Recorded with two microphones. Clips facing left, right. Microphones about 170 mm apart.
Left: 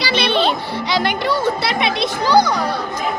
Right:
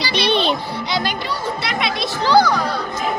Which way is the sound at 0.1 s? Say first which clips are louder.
Left 1 dB; 15° right (ahead or behind).